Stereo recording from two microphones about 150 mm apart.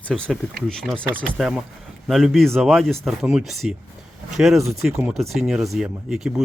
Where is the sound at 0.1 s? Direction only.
5° left (ahead or behind).